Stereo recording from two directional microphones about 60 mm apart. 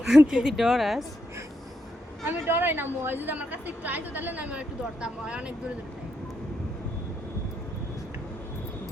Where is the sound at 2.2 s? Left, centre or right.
Right; by 5.5 s centre.